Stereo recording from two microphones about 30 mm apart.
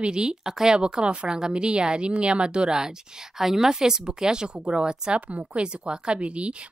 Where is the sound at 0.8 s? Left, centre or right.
Right.